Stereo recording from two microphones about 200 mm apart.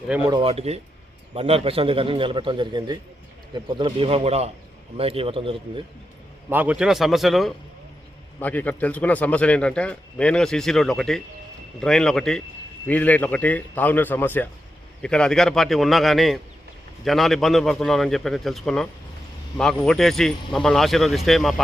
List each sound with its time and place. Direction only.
0.3 s a man's voice: 25° right (ahead or behind)
6.5 s a man's voice: 5° right (ahead or behind)